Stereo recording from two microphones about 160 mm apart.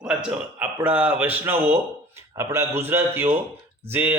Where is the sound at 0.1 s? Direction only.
5° right (ahead or behind).